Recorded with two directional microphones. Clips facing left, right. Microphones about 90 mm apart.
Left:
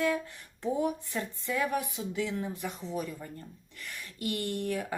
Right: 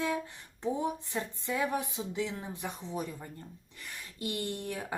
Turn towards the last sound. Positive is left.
turn(degrees=-25)  # may be behind; listen again after turning